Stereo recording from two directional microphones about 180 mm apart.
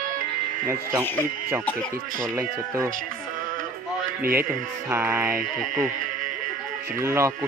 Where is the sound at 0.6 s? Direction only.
20° right (ahead or behind).